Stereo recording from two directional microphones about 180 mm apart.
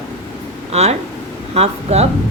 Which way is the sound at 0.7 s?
35° right (ahead or behind).